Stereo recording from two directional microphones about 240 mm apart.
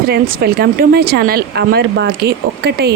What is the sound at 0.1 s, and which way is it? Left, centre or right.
Speech, right.